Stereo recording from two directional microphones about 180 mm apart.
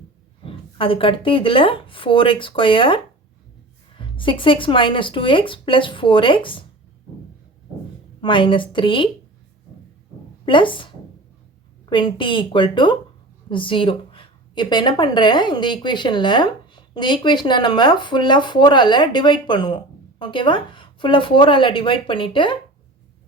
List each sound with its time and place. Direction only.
0.4 s a woman's voice: 30° left (ahead or behind)
8.2 s a woman's voice: 25° left (ahead or behind)
10.4 s a woman's voice: 25° left (ahead or behind)